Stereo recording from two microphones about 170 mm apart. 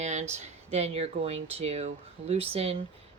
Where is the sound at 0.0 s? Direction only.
45° right (ahead or behind).